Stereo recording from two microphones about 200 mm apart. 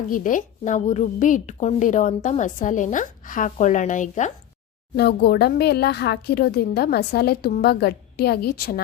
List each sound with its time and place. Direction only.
0.1 s a woman's voice: 40° left (ahead or behind)
4.9 s speech: 55° left (ahead or behind)